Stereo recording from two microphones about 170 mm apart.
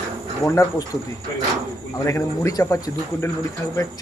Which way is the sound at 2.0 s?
15° left (ahead or behind).